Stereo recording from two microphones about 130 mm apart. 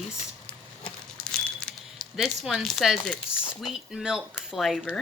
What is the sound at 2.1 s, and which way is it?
A child's voice, 5° right (ahead or behind).